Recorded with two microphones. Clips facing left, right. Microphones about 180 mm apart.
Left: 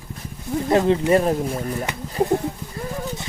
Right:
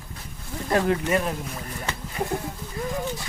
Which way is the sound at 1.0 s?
35° left (ahead or behind).